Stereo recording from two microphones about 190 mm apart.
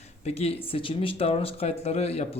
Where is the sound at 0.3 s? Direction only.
30° left (ahead or behind).